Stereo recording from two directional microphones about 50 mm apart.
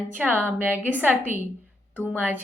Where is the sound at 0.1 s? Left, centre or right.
Right.